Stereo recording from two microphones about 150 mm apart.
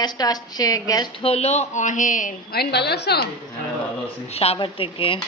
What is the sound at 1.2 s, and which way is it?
A woman's voice, 45° left (ahead or behind).